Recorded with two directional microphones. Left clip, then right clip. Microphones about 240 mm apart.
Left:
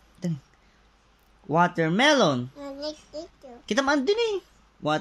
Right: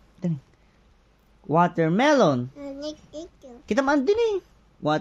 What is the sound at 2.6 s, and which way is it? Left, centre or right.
Speech, centre.